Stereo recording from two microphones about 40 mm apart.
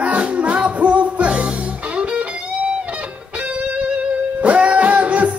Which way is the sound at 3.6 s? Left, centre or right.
Right.